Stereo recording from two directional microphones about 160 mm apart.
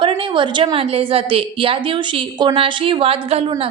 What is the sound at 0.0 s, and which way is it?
A woman's voice, 30° right (ahead or behind).